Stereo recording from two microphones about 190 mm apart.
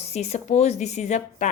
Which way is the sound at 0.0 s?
35° left (ahead or behind).